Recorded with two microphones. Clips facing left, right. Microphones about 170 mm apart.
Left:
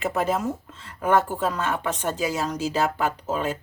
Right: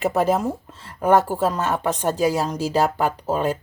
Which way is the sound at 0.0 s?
40° right (ahead or behind).